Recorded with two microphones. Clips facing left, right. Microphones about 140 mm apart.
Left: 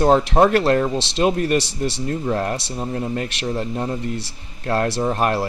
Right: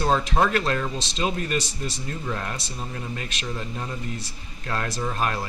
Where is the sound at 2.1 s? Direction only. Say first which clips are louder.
Left 9 dB; 40° left (ahead or behind).